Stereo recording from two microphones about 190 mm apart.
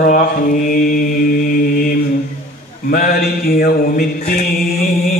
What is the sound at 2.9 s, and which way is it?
Mantra, 50° left (ahead or behind).